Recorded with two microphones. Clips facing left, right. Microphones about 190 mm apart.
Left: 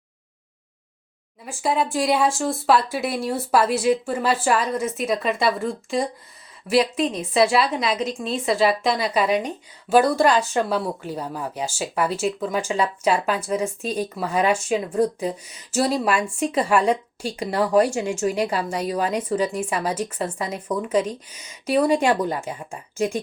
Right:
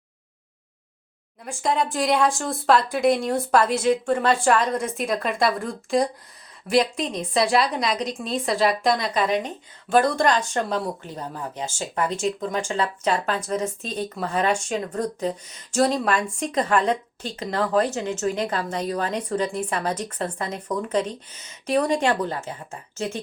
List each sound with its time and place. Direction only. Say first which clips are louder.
1.5 s a woman's voice: left 1 dB; 5° left (ahead or behind)